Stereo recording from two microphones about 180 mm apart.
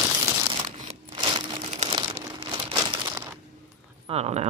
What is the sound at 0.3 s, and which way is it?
Crumpling, 25° right (ahead or behind).